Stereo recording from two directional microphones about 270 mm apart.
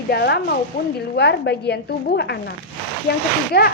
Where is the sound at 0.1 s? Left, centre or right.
Left.